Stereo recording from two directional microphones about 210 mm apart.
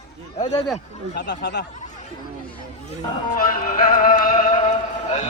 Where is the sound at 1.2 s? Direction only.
55° left (ahead or behind).